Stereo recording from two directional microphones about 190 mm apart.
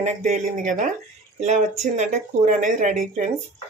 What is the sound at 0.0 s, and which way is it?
Speech, 40° right (ahead or behind).